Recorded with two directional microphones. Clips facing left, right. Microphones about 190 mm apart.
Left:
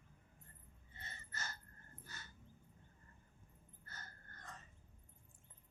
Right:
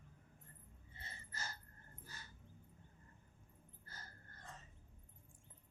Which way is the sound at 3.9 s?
30° right (ahead or behind).